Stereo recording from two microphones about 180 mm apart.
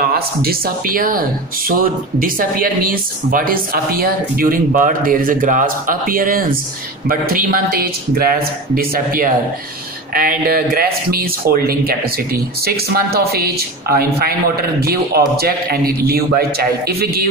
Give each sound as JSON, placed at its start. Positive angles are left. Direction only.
{"t": 0.0, "sound": "a man's voice", "side_deg": -55}